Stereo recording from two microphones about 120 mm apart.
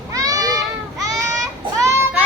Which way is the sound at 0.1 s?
30° right (ahead or behind).